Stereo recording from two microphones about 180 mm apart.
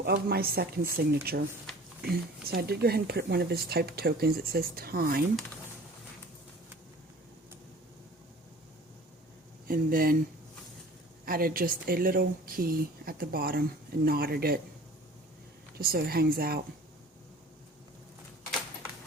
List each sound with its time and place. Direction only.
0.0 s speech: 60° right (ahead or behind)
9.6 s speech: 55° right (ahead or behind)
11.3 s speech: 55° right (ahead or behind)
15.8 s speech: 55° right (ahead or behind)